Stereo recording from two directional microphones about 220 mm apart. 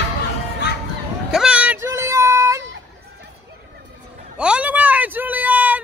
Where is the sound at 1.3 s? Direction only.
5° right (ahead or behind).